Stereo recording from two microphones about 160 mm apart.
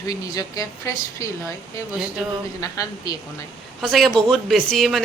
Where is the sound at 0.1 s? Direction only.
20° left (ahead or behind).